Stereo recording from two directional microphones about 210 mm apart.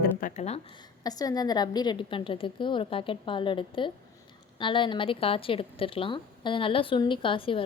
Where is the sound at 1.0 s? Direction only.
20° left (ahead or behind).